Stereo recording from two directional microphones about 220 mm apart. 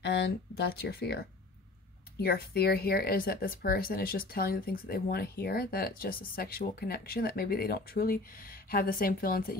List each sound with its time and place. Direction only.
0.0 s speech: 50° left (ahead or behind)